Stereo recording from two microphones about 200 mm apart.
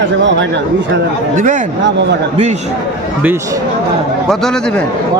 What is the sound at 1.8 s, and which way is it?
Speech, 60° right (ahead or behind).